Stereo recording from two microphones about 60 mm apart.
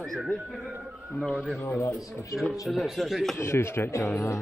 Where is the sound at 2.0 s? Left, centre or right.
Left.